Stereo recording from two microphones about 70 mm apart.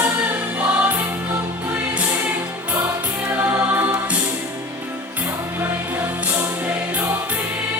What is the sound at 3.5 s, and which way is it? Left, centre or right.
Music, right.